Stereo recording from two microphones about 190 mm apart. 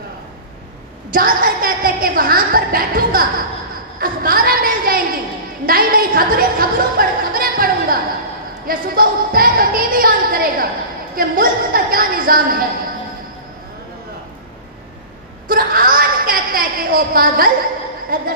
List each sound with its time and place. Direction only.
1.1 s a woman's voice: 50° right (ahead or behind)
15.4 s a sound: 50° right (ahead or behind)
18.1 s a woman's voice: 50° right (ahead or behind)